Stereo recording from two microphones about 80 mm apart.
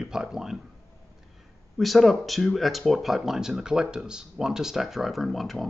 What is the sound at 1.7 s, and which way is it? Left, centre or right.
Speech, centre.